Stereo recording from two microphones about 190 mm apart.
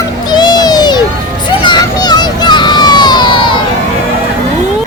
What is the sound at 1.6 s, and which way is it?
Vehicle, 20° left (ahead or behind).